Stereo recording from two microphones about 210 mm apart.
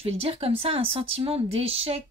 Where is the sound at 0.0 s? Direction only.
30° right (ahead or behind).